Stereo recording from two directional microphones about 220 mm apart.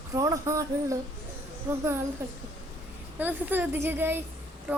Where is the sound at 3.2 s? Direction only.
10° right (ahead or behind).